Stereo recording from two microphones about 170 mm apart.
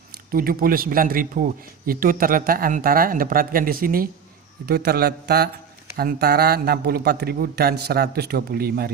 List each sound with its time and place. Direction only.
0.3 s a man's voice: 60° right (ahead or behind)